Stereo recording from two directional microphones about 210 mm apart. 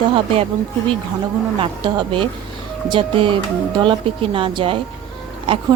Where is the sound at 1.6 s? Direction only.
25° right (ahead or behind).